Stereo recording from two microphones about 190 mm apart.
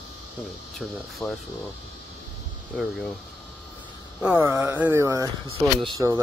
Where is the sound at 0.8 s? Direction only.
Centre (ahead or behind).